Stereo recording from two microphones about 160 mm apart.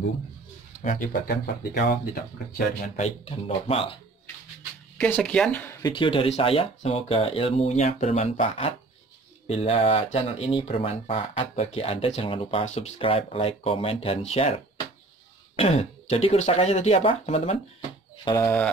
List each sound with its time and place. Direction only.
0.8 s speech: 60° left (ahead or behind); by 2.6 s 80° left
3.0 s speech: 35° left (ahead or behind)
4.9 s speech: 5° left (ahead or behind)
5.8 s speech: 30° left (ahead or behind)
15.5 s speech: 40° left (ahead or behind)
18.2 s speech: 15° left (ahead or behind)